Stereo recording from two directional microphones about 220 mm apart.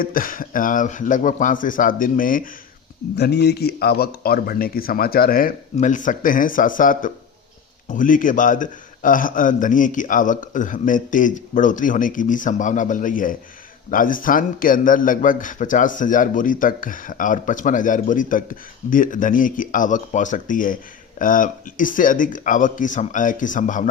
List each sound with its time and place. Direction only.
0.0 s a man's voice: 40° left (ahead or behind)